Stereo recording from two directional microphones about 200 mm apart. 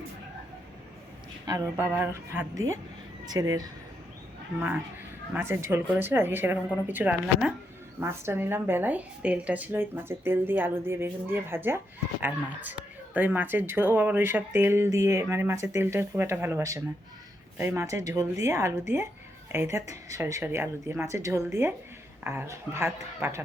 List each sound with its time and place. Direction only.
1.5 s speech: 15° right (ahead or behind)
5.3 s speech: 10° right (ahead or behind)
13.1 s speech: 10° right (ahead or behind)